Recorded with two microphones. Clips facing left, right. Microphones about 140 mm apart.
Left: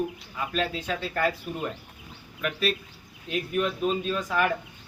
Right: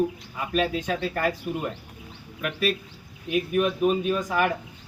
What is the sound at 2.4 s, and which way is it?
A man's voice, 10° right (ahead or behind).